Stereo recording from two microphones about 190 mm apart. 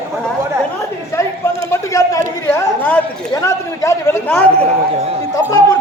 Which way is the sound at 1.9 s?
15° left (ahead or behind).